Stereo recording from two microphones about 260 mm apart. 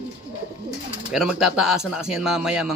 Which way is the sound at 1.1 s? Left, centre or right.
Centre.